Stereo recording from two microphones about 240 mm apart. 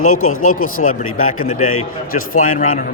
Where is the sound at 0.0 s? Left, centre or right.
Left.